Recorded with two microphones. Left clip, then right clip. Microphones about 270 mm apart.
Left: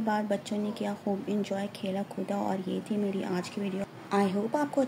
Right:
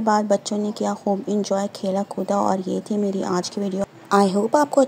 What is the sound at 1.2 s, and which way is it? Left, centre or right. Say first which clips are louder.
Speech: right 10 dB; centre.